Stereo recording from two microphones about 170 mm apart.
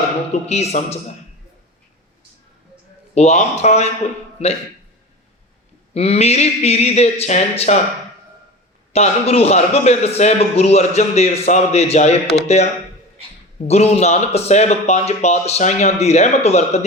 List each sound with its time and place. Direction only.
0.4 s a man's voice: 40° left (ahead or behind)
3.2 s a man's voice: 40° left (ahead or behind)
5.9 s a man's voice: 35° left (ahead or behind)
8.9 s a man's voice: 35° left (ahead or behind)
13.7 s a man's voice: 40° left (ahead or behind)